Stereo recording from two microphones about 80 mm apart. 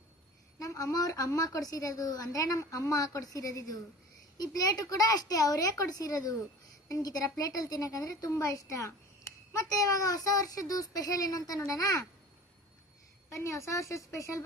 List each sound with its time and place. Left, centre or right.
0.6 s a woman's voice: left
13.3 s a woman's voice: left